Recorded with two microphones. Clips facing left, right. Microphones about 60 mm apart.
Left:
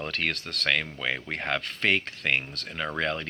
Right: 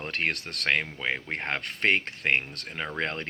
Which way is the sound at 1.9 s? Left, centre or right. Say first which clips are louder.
Right 1 dB; right.